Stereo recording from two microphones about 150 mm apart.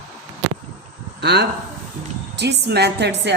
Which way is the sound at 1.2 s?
90° right.